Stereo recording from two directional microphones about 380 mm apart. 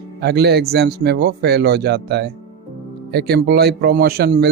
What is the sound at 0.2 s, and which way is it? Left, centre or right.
Speech, right.